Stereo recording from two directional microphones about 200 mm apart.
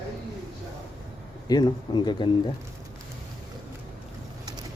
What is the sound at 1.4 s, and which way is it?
Speech, 20° left (ahead or behind).